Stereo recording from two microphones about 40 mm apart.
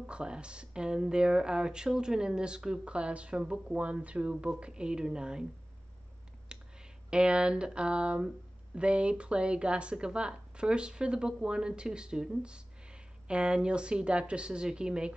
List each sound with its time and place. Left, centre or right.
0.0 s speech: right
3.7 s speech: right
6.5 s speech: right